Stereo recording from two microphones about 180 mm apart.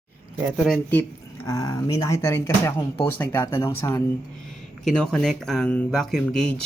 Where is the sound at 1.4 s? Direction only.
20° left (ahead or behind).